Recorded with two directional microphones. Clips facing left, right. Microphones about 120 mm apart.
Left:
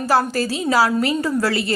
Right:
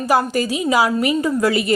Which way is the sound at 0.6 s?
15° right (ahead or behind).